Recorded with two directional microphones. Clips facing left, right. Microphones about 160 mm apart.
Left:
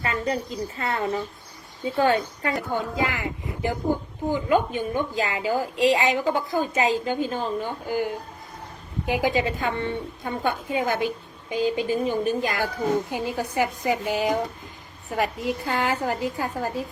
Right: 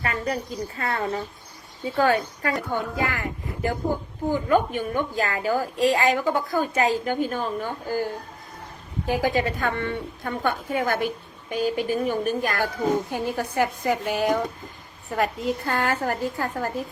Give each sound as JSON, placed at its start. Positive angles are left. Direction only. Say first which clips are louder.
{"t": 0.0, "sound": "a woman's voice", "louder": "left 1 dB", "side_deg": 25}